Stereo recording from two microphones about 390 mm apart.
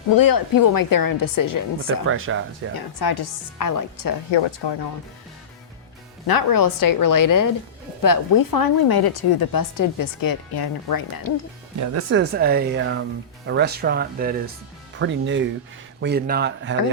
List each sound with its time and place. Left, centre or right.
0.2 s a woman's voice: left
2.0 s speech: right
2.7 s a woman's voice: left
4.3 s speech: left
6.2 s a woman's voice: left
11.9 s speech: right